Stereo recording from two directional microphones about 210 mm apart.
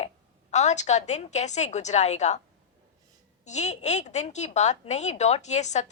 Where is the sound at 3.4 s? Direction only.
35° left (ahead or behind).